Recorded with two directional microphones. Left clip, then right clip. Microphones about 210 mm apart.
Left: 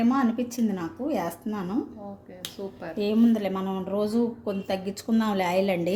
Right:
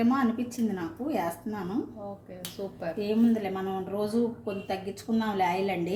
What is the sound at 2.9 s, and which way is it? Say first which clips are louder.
A woman's voice: left 4 dB; 45° left (ahead or behind).